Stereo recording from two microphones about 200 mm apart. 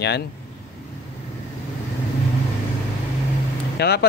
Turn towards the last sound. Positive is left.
turn(degrees=55)  # may be behind; listen again after turning